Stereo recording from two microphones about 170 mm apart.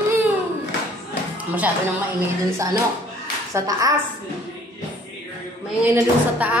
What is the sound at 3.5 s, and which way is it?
Speech, 20° right (ahead or behind).